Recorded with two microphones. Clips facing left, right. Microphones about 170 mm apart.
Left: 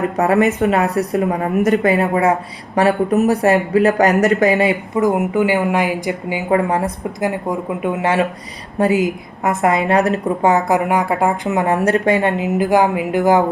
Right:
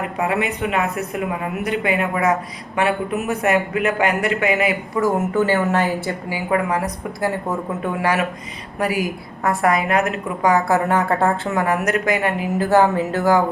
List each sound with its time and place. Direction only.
0.2 s a woman's voice: 45° left (ahead or behind)
4.9 s a woman's voice: 15° left (ahead or behind)